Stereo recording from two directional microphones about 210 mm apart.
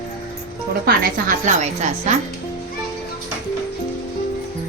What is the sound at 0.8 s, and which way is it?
Speech, 40° right (ahead or behind).